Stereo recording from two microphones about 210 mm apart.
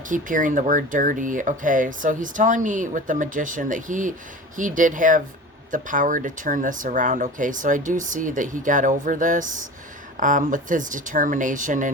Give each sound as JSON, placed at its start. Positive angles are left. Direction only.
{"t": 0.1, "sound": "speech", "side_deg": -40}